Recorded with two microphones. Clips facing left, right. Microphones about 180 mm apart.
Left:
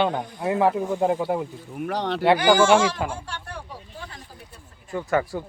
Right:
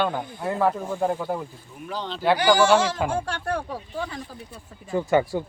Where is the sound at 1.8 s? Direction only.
70° left (ahead or behind).